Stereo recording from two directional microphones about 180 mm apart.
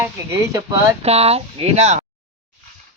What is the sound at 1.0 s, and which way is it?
Speech, 35° right (ahead or behind).